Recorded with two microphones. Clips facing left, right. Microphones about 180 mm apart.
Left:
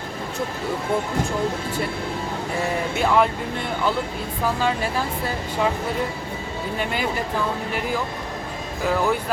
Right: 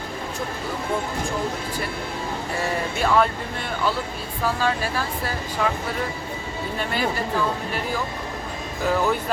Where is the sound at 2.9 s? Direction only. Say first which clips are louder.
Left 1 dB; 15° left (ahead or behind).